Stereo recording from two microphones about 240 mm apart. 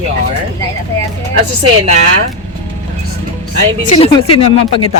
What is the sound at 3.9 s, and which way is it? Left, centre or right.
Speech, left.